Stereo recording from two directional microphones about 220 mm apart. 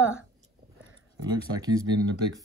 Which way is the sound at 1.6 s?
15° right (ahead or behind).